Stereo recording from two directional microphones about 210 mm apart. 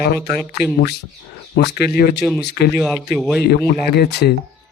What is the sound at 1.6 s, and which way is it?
Speech, 50° left (ahead or behind).